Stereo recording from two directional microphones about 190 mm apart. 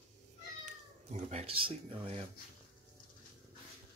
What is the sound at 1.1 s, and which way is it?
Speech, 35° right (ahead or behind).